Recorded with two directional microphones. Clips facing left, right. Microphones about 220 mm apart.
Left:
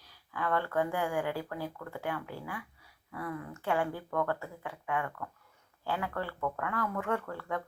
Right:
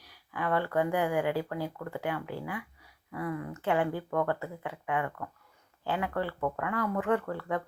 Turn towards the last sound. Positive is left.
turn(degrees=-15)  # may be behind; listen again after turning